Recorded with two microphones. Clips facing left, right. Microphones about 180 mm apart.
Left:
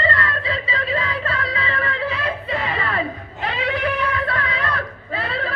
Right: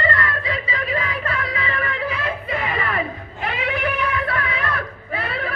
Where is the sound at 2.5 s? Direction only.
30° left (ahead or behind).